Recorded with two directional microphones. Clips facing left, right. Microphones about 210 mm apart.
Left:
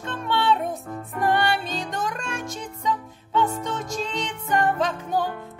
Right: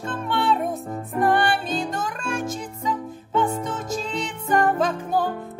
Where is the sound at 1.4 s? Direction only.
5° right (ahead or behind).